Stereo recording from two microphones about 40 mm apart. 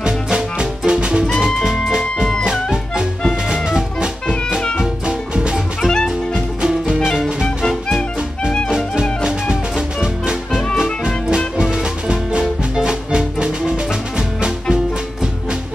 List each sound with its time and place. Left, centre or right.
0.0 s music: right
5.0 s music: right
5.8 s music: centre
9.2 s music: centre